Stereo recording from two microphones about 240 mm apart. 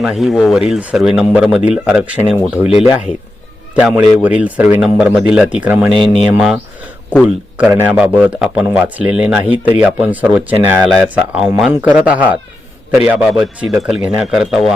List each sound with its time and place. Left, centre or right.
0.0 s a man's voice: centre
2.6 s speech: left
3.8 s a man's voice: centre